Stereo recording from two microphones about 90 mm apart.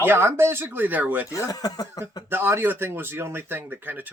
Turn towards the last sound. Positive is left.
turn(degrees=-20)  # may be behind; listen again after turning